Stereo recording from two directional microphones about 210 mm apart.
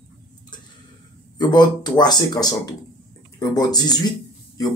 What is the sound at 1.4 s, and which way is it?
Speech, 20° left (ahead or behind).